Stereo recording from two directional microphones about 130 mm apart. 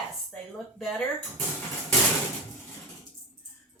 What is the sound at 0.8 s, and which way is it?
Speech, centre (ahead or behind).